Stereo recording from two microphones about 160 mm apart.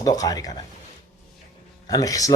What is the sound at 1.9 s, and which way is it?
Speech, 20° left (ahead or behind).